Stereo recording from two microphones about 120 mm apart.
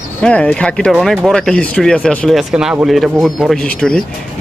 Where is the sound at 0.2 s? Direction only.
10° left (ahead or behind).